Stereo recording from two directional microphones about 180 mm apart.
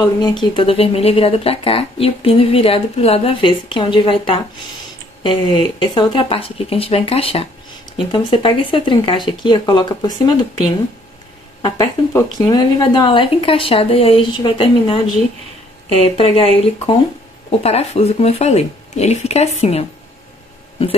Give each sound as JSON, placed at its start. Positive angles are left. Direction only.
{"t": 0.0, "sound": "speech", "side_deg": 25}
{"t": 11.6, "sound": "speech", "side_deg": 15}